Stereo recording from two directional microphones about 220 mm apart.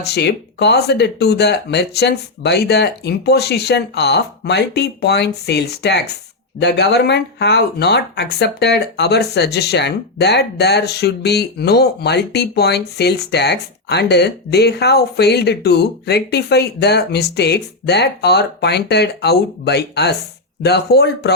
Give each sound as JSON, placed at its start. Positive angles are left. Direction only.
{"t": 0.0, "sound": "speech", "side_deg": 50}